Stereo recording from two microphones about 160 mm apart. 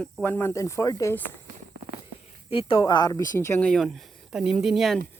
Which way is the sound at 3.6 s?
5° left (ahead or behind).